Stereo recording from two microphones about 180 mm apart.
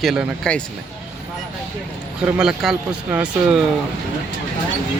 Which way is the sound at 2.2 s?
5° right (ahead or behind).